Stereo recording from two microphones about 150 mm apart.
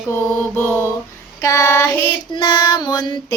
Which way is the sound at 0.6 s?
10° left (ahead or behind).